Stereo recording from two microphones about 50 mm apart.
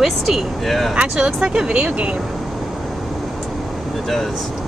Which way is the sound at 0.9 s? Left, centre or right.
Centre.